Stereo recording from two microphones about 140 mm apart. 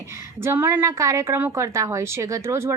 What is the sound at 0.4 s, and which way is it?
A woman's voice, 15° right (ahead or behind).